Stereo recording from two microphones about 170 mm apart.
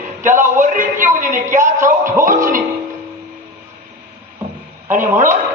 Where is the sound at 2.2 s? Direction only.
50° right (ahead or behind).